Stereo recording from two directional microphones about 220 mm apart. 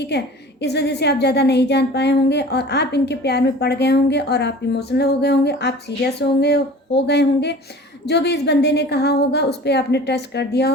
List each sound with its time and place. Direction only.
0.1 s speech: 50° left (ahead or behind)